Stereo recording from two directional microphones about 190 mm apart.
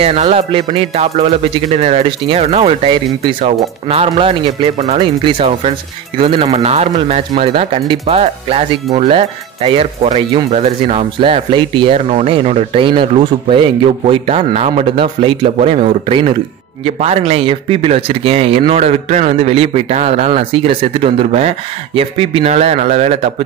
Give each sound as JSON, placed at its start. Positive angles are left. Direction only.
{"t": 0.0, "sound": "a man's voice", "side_deg": -35}